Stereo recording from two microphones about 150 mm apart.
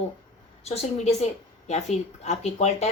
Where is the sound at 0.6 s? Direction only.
45° left (ahead or behind).